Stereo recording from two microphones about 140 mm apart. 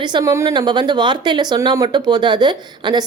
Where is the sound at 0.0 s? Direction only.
30° right (ahead or behind).